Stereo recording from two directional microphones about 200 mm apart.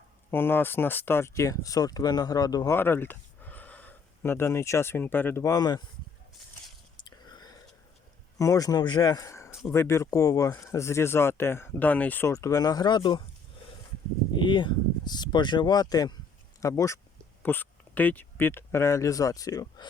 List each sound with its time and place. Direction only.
0.3 s speech: 10° left (ahead or behind)
6.9 s whispering: 20° left (ahead or behind)
8.4 s speech: 15° left (ahead or behind)
14.3 s speech: 25° left (ahead or behind)